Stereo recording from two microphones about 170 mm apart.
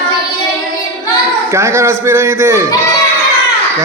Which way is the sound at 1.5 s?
15° right (ahead or behind).